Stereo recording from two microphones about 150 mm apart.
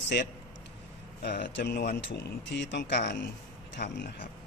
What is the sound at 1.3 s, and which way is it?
Speech, 90° left.